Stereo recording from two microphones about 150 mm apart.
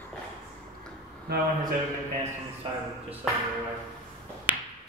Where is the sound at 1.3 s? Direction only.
90° right.